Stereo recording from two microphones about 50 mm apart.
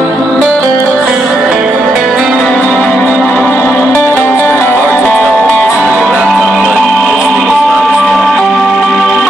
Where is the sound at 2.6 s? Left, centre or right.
Left.